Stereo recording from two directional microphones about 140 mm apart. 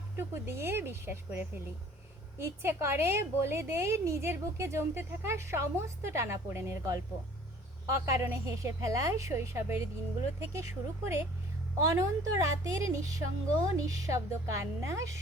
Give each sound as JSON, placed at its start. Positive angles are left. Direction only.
{"t": 0.2, "sound": "a woman's voice", "side_deg": -15}